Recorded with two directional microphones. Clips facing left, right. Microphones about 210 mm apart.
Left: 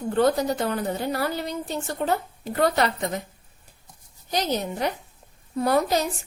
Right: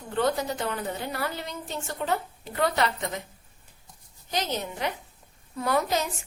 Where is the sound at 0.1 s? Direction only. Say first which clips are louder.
Left 5 dB; 40° left (ahead or behind).